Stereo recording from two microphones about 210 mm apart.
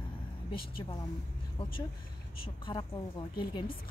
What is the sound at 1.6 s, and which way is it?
Speech, 25° left (ahead or behind).